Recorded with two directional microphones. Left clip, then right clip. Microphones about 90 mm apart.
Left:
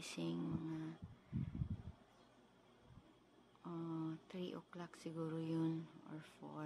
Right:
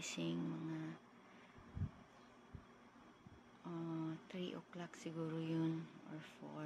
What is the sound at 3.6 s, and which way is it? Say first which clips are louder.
Speech: even; 30° left (ahead or behind).